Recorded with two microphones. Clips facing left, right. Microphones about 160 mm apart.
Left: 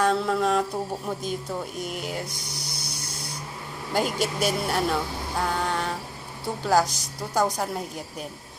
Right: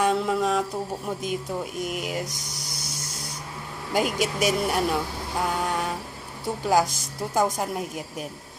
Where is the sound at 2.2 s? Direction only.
40° right (ahead or behind).